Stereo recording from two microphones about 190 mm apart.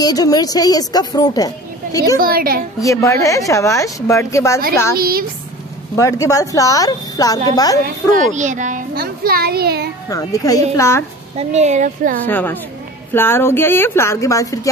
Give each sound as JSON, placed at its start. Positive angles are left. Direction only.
{"t": 0.0, "sound": "a woman's voice", "side_deg": 20}
{"t": 2.1, "sound": "a child's voice", "side_deg": -50}
{"t": 2.8, "sound": "a woman's voice", "side_deg": 15}
{"t": 4.9, "sound": "a child's voice", "side_deg": -50}
{"t": 5.9, "sound": "a woman's voice", "side_deg": 15}
{"t": 7.8, "sound": "a child's voice", "side_deg": -40}
{"t": 10.0, "sound": "a woman's voice", "side_deg": 20}
{"t": 11.3, "sound": "a woman's voice", "side_deg": -35}
{"t": 12.3, "sound": "a woman's voice", "side_deg": 10}